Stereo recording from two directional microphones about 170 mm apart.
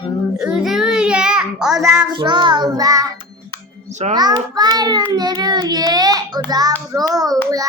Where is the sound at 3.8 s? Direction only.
45° right (ahead or behind).